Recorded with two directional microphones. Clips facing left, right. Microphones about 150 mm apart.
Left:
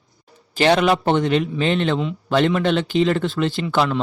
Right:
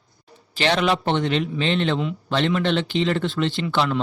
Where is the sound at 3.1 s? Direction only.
Centre (ahead or behind).